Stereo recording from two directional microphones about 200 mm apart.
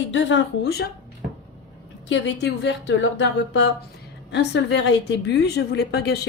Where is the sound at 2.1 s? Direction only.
60° left (ahead or behind).